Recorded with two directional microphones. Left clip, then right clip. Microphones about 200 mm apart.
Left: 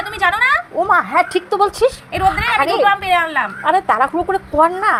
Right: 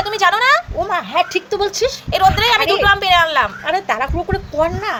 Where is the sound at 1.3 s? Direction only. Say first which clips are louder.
Left 3 dB; 10° left (ahead or behind).